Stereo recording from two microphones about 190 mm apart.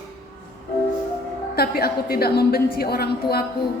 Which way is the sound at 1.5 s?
55° left (ahead or behind).